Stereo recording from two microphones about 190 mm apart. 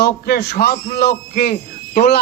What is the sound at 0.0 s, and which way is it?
A man's voice, 55° left (ahead or behind).